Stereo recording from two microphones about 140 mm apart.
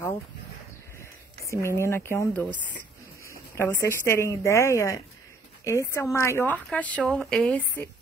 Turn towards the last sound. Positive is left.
turn(degrees=5)  # may be behind; listen again after turning